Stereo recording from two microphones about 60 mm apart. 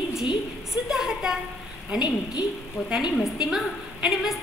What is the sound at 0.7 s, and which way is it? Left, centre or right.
Speech, centre.